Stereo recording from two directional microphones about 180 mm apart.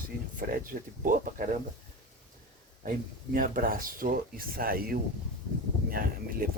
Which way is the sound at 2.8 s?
55° right (ahead or behind).